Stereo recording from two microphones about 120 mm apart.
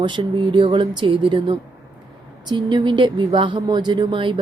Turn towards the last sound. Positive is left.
turn(degrees=-45)  # may be behind; listen again after turning